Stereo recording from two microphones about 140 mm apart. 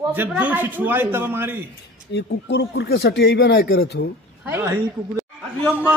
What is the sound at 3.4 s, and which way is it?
Speech, 90° left.